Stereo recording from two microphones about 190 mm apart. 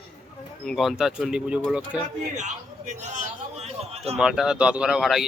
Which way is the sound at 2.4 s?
40° right (ahead or behind).